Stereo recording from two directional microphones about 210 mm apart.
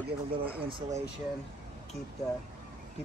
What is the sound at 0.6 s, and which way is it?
Speech, 20° right (ahead or behind).